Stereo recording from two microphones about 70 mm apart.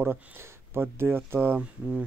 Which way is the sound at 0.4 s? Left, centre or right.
Right.